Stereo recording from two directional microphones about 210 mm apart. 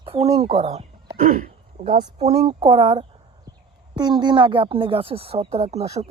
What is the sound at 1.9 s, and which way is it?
Speech, 30° right (ahead or behind).